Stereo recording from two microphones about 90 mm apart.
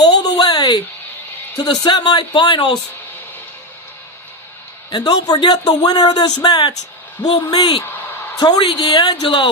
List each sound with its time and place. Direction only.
0.0 s a sound: 50° left (ahead or behind)
1.5 s speech: 55° left (ahead or behind)
4.9 s a man's voice: 50° left (ahead or behind)
8.4 s a man's voice: 50° left (ahead or behind)